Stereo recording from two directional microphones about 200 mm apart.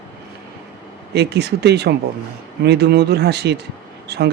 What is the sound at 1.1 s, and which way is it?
Speech, 55° right (ahead or behind).